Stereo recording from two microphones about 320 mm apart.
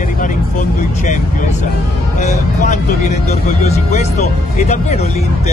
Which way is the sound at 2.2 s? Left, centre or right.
Left.